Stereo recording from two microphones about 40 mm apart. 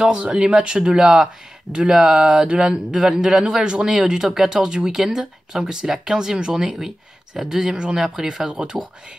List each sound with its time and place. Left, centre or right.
0.0 s speech: right
8.5 s speech: right